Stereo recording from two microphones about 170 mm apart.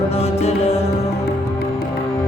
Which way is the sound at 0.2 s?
35° left (ahead or behind).